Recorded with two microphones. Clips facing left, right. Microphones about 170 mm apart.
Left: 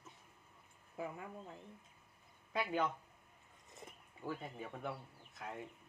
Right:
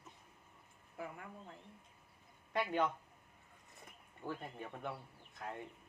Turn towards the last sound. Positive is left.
turn(degrees=0)  # may be behind; listen again after turning